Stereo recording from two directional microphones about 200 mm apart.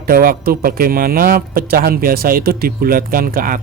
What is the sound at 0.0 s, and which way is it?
Speech, 45° right (ahead or behind).